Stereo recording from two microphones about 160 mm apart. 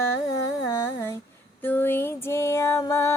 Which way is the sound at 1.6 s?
10° left (ahead or behind).